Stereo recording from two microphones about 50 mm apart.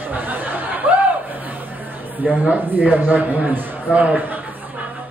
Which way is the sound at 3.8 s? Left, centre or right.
Right.